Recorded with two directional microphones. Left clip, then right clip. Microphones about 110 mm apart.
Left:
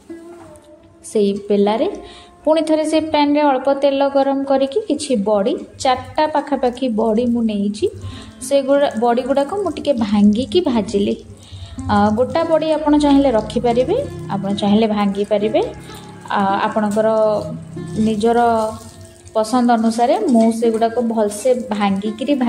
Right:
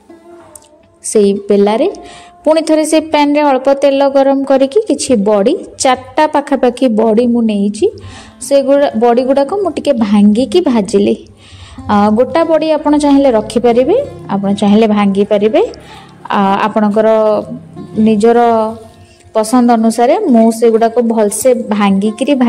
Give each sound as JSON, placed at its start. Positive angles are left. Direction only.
{"t": 1.1, "sound": "a woman's voice", "side_deg": -45}
{"t": 18.0, "sound": "a woman's voice", "side_deg": -50}